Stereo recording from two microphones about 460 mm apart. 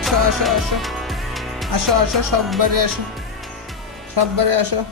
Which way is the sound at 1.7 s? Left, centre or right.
Right.